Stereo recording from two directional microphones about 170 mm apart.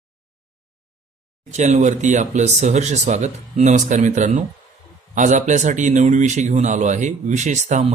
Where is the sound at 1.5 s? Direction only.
45° right (ahead or behind).